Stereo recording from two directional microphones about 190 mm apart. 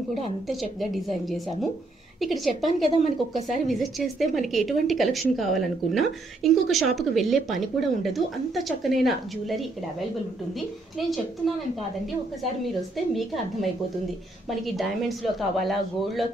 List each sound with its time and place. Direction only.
0.5 s a woman's voice: centre (ahead or behind)
2.9 s speech: 40° left (ahead or behind)
3.6 s a woman's voice: centre (ahead or behind)
12.9 s a woman's voice: centre (ahead or behind)